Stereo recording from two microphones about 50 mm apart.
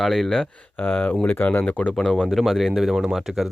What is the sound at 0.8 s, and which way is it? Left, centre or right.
Speech, left.